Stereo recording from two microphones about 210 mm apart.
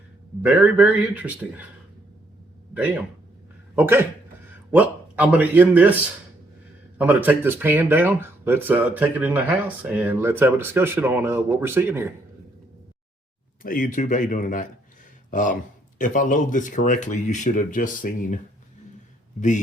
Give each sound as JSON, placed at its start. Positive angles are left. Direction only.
{"t": 0.4, "sound": "speech", "side_deg": -5}
{"t": 2.7, "sound": "speech", "side_deg": -10}
{"t": 7.0, "sound": "speech", "side_deg": -10}
{"t": 13.6, "sound": "speech", "side_deg": 40}